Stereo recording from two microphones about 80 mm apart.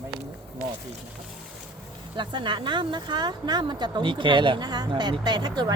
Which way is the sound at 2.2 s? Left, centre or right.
Right.